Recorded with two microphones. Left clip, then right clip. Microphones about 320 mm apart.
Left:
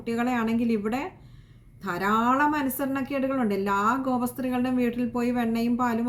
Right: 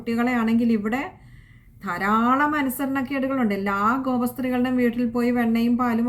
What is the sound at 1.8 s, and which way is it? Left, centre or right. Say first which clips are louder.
A woman's voice: right 3 dB; centre.